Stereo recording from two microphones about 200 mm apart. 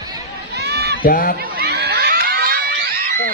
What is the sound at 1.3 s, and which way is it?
Crowd, 50° right (ahead or behind).